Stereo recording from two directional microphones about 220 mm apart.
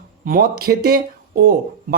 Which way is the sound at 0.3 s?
40° right (ahead or behind).